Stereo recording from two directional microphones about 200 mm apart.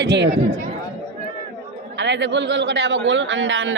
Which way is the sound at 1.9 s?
60° right (ahead or behind).